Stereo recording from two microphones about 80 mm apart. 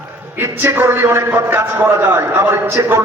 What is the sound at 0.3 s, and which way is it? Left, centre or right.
A man's voice, right.